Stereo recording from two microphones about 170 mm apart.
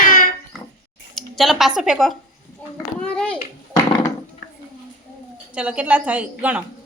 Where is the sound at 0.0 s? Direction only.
55° left (ahead or behind).